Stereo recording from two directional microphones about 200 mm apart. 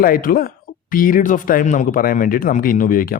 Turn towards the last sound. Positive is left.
turn(degrees=45)  # may be behind; listen again after turning